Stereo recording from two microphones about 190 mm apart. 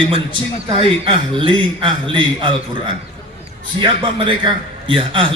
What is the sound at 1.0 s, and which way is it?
A man's voice, 25° right (ahead or behind).